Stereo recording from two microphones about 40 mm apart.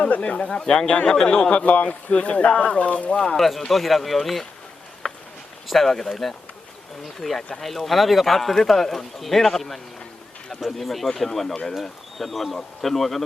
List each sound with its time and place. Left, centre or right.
0.0 s speech: left
0.4 s speech: centre
1.5 s speech: left
3.3 s a man's voice: centre
5.0 s a sound: left
5.6 s a man's voice: centre
11.8 s a man's voice: centre